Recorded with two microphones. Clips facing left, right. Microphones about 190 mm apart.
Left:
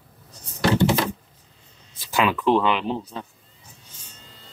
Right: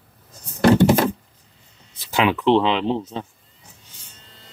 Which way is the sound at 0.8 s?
50° right (ahead or behind).